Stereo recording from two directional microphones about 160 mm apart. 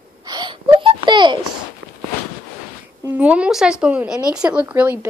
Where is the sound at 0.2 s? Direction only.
25° right (ahead or behind).